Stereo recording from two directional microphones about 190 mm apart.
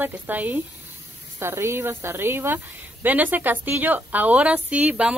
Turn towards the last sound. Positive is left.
turn(degrees=-5)  # may be behind; listen again after turning